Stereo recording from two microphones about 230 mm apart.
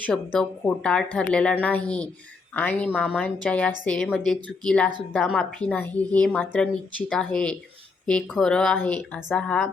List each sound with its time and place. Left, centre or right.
0.0 s a woman's voice: centre